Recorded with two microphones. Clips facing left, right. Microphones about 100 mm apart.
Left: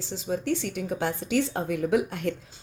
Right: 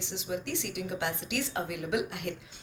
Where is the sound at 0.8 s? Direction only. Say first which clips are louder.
Left 5 dB; 35° left (ahead or behind).